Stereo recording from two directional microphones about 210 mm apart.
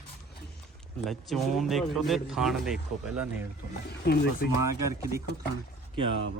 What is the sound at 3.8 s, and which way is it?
Speech, 50° left (ahead or behind).